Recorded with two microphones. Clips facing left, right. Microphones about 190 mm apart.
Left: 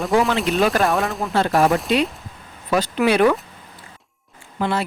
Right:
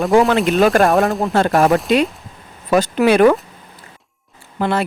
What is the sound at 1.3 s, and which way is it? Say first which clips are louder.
Speech: right 2 dB; 50° right (ahead or behind).